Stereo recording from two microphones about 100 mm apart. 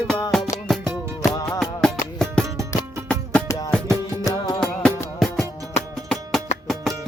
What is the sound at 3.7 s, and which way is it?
Music, 10° left (ahead or behind).